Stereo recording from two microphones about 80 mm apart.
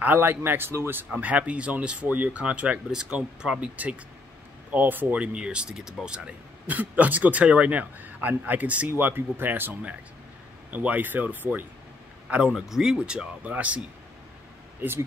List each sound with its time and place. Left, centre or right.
0.0 s speech: right
1.1 s speech: centre
12.3 s speech: centre
14.8 s speech: right